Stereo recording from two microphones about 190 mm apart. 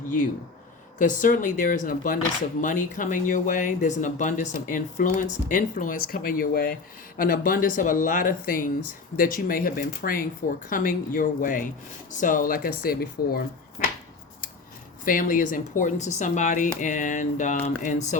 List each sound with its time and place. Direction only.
0.9 s speech: 40° left (ahead or behind)
15.0 s speech: 45° left (ahead or behind)